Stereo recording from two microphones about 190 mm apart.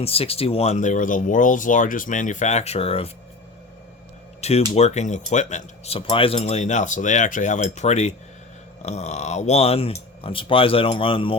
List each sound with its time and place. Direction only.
0.0 s speech: 30° left (ahead or behind)
4.4 s speech: 35° left (ahead or behind)